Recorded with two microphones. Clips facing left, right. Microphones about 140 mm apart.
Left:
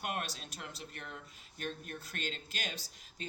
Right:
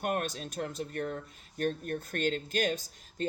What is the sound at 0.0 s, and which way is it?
Speech, 45° right (ahead or behind).